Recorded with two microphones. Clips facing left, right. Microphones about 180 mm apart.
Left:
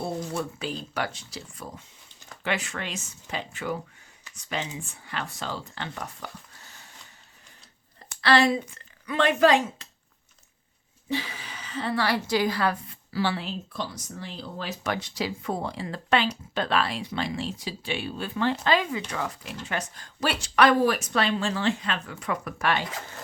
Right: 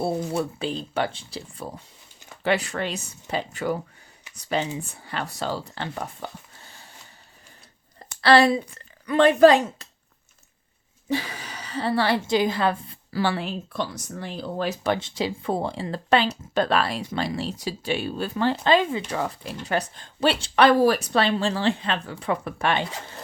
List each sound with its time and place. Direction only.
0.0 s speech: 30° right (ahead or behind)
8.2 s a woman's voice: 35° right (ahead or behind)
11.1 s a woman's voice: 45° right (ahead or behind); by 13.0 s 25° right (ahead or behind)
13.1 s speech: 50° right (ahead or behind)
14.8 s speech: 25° right (ahead or behind)